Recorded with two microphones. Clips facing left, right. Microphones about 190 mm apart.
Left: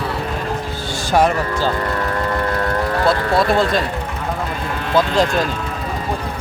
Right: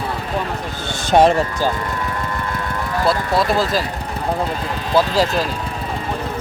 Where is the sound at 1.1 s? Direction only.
30° right (ahead or behind).